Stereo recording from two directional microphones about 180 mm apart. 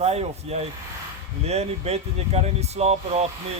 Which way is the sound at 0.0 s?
35° right (ahead or behind).